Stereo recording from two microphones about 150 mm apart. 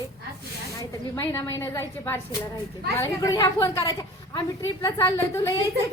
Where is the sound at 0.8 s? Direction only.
20° left (ahead or behind).